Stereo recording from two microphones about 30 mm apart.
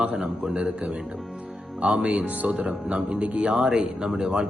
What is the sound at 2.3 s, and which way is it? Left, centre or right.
Speech, right.